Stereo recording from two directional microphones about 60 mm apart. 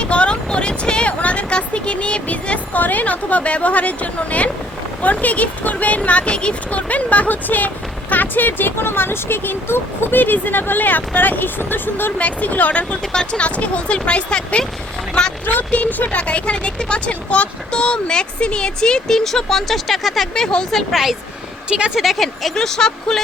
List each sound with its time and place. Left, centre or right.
0.0 s speech: centre
20.3 s speech: centre
21.7 s speech: centre
21.9 s speech: centre